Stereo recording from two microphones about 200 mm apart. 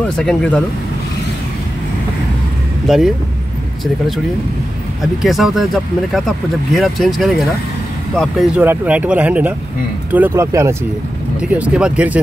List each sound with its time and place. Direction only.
0.0 s speech: 5° left (ahead or behind)
2.9 s speech: centre (ahead or behind)
5.2 s speech: centre (ahead or behind)